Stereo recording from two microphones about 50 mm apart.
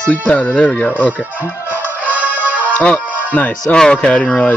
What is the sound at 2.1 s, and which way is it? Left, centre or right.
Music, right.